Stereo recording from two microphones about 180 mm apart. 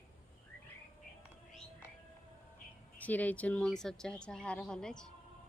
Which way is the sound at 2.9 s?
10° left (ahead or behind).